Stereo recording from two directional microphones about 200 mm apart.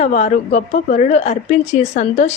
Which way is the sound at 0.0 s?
35° left (ahead or behind).